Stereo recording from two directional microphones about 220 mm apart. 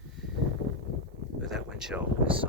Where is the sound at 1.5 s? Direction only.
Centre (ahead or behind).